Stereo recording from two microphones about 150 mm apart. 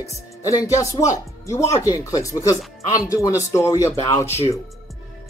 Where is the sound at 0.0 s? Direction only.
20° left (ahead or behind).